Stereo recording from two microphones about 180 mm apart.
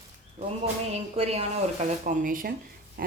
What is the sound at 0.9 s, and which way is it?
A man's voice, 35° right (ahead or behind).